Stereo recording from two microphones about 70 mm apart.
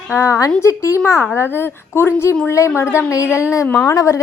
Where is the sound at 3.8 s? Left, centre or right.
Left.